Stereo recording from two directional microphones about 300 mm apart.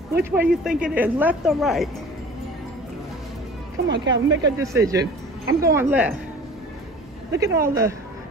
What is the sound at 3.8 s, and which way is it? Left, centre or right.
Speech, right.